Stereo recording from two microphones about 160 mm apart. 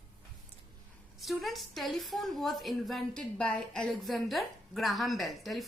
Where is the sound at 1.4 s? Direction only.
Centre (ahead or behind).